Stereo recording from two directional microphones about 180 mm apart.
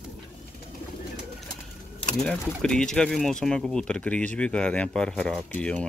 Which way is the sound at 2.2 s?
5° left (ahead or behind).